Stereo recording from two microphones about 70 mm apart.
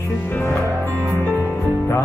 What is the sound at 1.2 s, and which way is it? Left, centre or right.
Music, left.